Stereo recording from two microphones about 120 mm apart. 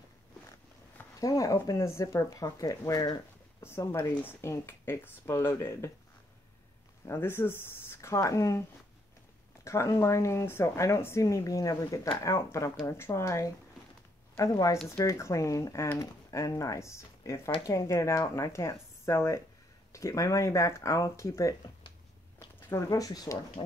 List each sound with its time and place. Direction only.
1.2 s a woman's voice: 30° left (ahead or behind)
7.1 s a woman's voice: 20° left (ahead or behind)
9.7 s a woman's voice: 25° left (ahead or behind)